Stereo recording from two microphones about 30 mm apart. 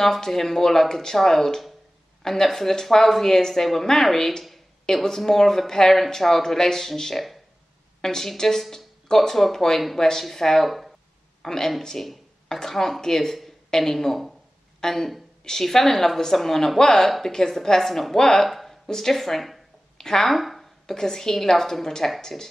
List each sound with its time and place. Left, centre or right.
0.0 s speech: centre
8.0 s a woman's voice: centre
10.6 s speech: centre
11.4 s speech: centre
12.0 s speech: left
18.5 s a sound: centre
18.9 s speech: centre
20.0 s speech: centre
20.2 s a sound: centre
20.8 s speech: centre